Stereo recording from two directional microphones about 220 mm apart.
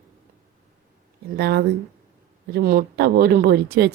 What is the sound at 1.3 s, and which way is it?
Speech, 45° right (ahead or behind).